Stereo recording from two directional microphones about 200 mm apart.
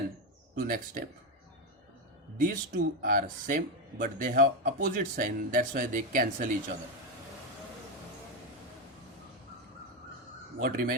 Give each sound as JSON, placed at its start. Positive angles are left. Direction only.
{"t": 0.6, "sound": "speech", "side_deg": -45}
{"t": 2.4, "sound": "speech", "side_deg": -45}
{"t": 10.6, "sound": "speech", "side_deg": -45}